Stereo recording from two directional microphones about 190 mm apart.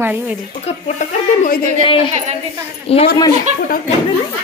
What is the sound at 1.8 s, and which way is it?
A child's voice, 30° left (ahead or behind).